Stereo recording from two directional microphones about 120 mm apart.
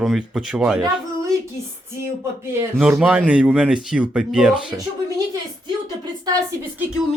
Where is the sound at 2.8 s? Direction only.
10° right (ahead or behind).